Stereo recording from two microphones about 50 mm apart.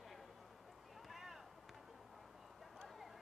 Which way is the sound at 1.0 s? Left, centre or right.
Centre.